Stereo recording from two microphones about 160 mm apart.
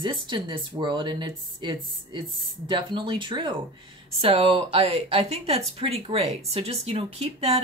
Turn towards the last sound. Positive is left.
turn(degrees=-40)  # may be behind; listen again after turning